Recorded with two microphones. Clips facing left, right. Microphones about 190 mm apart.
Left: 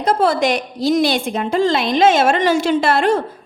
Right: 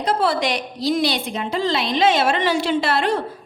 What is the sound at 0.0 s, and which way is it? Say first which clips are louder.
A woman's voice: left 4 dB; 45° left (ahead or behind).